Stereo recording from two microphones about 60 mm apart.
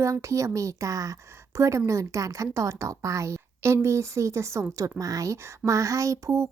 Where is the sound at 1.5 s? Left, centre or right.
Right.